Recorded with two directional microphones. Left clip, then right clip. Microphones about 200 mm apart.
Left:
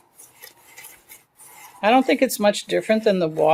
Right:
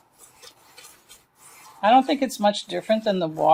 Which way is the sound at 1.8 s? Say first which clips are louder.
Left 1 dB; 45° left (ahead or behind).